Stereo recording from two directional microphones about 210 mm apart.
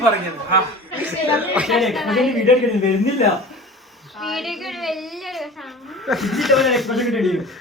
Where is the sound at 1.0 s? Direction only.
5° right (ahead or behind).